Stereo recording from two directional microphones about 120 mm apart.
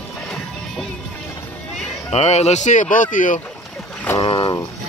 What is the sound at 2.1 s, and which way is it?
Speech, 65° left (ahead or behind).